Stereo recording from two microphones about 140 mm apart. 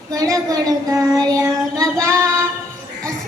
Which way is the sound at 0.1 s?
25° right (ahead or behind).